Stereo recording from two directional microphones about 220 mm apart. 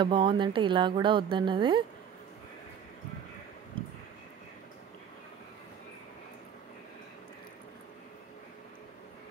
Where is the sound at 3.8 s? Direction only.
25° right (ahead or behind).